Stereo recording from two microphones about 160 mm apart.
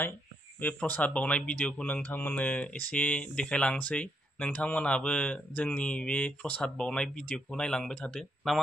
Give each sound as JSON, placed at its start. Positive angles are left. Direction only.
{"t": 0.6, "sound": "speech", "side_deg": 10}